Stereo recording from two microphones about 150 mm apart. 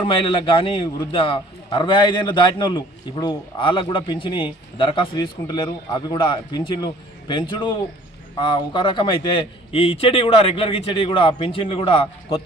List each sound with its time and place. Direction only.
0.0 s a man's voice: 35° left (ahead or behind)